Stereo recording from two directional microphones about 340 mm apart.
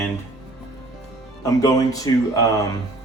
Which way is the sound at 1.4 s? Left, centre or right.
Centre.